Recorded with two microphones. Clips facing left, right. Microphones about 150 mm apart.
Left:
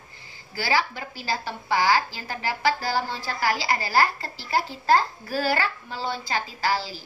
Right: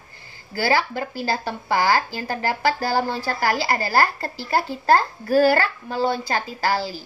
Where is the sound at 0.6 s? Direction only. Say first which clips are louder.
Right 4 dB; 50° right (ahead or behind).